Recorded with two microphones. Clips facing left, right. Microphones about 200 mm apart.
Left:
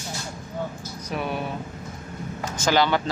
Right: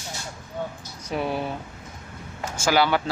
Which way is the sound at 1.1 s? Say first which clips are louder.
Right 2 dB; 25° right (ahead or behind).